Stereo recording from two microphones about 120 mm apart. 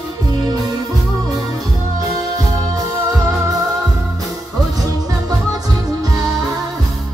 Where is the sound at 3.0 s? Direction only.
25° right (ahead or behind).